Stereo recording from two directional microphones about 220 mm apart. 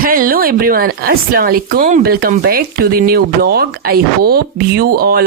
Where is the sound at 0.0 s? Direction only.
40° right (ahead or behind).